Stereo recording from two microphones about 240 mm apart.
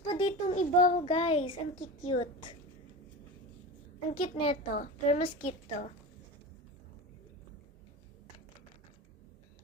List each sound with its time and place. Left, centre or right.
0.0 s a child's voice: left
4.1 s a child's voice: left